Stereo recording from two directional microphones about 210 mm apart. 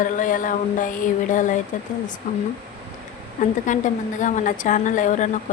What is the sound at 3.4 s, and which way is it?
A woman's voice, 35° left (ahead or behind).